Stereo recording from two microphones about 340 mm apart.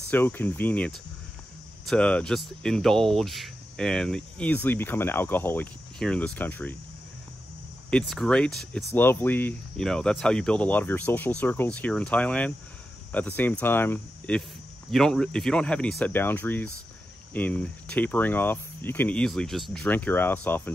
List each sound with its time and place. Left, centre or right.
0.1 s speech: centre
8.1 s speech: centre